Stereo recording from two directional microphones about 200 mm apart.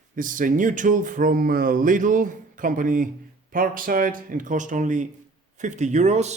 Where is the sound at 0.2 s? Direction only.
40° right (ahead or behind).